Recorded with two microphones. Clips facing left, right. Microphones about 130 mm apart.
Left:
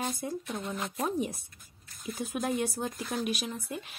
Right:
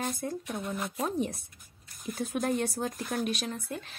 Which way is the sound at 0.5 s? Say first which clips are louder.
Right 1 dB; centre (ahead or behind).